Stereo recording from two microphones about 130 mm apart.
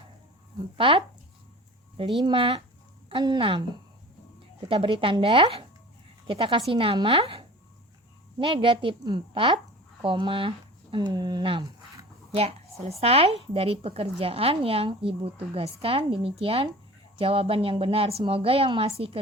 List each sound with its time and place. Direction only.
0.8 s a woman's voice: 40° right (ahead or behind)
4.7 s a woman's voice: 40° right (ahead or behind)
12.3 s a woman's voice: 50° right (ahead or behind)